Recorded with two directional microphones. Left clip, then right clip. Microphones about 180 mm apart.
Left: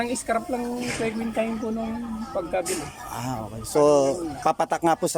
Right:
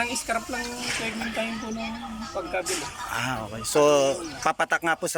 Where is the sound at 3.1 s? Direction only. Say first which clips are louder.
Right 3 dB; 20° left (ahead or behind).